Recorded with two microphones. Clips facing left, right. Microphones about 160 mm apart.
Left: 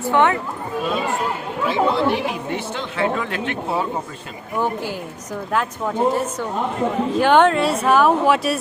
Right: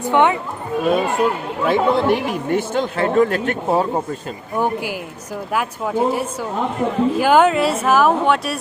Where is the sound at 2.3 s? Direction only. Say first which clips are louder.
Right 6 dB; 45° right (ahead or behind).